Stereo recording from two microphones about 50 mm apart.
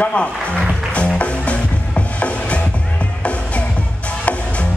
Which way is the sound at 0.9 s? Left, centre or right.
Left.